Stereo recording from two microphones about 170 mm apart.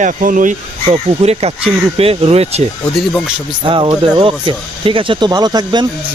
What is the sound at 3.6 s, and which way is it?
Speech, 30° right (ahead or behind).